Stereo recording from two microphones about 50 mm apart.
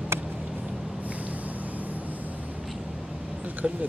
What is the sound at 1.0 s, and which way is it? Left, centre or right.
Vehicle, right.